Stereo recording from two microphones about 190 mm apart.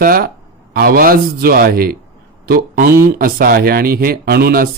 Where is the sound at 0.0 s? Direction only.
50° right (ahead or behind).